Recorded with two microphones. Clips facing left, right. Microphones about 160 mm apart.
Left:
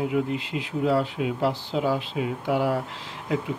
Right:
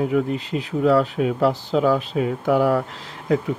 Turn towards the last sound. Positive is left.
turn(degrees=-45)  # may be behind; listen again after turning